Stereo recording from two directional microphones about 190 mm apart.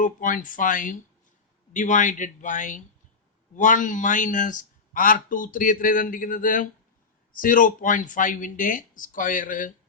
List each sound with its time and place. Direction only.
0.0 s a man's voice: 45° left (ahead or behind)